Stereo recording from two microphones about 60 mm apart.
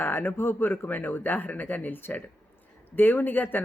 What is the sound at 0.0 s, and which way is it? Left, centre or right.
A woman's voice, left.